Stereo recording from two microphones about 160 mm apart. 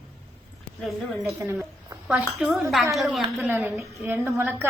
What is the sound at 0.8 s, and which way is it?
A woman's voice, centre (ahead or behind).